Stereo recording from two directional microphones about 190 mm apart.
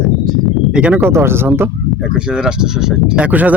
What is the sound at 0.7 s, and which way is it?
Speech, 5° right (ahead or behind).